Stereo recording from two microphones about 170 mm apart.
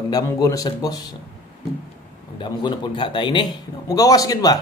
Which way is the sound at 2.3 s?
25° left (ahead or behind).